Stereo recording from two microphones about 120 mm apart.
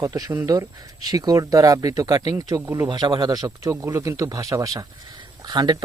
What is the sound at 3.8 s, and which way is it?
Speech, 20° right (ahead or behind).